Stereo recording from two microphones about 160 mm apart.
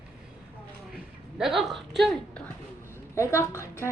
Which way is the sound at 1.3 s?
Centre (ahead or behind).